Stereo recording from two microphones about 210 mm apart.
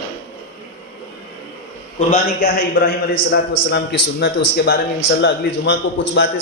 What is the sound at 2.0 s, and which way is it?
Speech, 40° left (ahead or behind).